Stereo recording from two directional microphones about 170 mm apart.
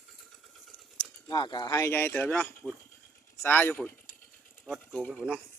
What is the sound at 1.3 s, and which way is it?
Speech, 25° left (ahead or behind).